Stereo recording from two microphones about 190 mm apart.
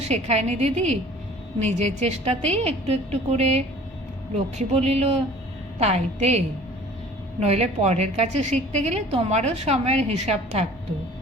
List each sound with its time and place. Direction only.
0.0 s a woman's voice: 35° right (ahead or behind)